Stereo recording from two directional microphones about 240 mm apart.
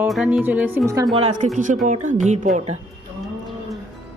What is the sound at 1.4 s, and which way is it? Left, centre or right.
Speech, right.